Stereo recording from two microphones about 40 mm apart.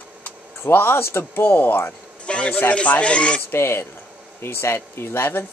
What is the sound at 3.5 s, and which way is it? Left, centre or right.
Speech, left.